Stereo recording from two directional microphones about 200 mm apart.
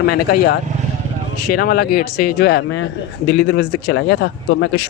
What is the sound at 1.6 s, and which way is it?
A man's voice, 50° left (ahead or behind).